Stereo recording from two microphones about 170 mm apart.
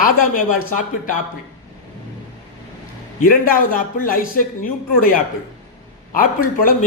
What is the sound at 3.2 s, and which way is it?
A man's voice, 55° left (ahead or behind).